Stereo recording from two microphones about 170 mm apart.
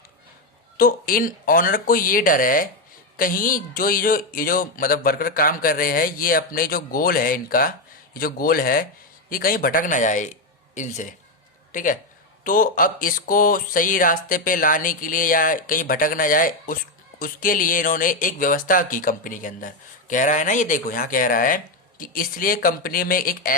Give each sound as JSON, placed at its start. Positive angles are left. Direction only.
{"t": 0.8, "sound": "a man's voice", "side_deg": 55}